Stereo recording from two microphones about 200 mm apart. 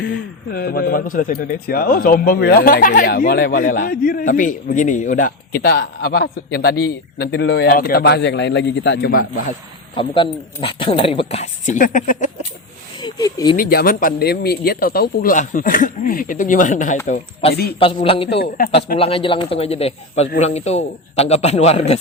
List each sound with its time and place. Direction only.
0.5 s a man's voice: 50° left (ahead or behind)
9.9 s speech: 25° left (ahead or behind); by 12.3 s 40° left (ahead or behind)
13.0 s speech: 20° left (ahead or behind)
13.6 s a man's voice: 45° left (ahead or behind)
17.4 s a man's voice: 30° left (ahead or behind)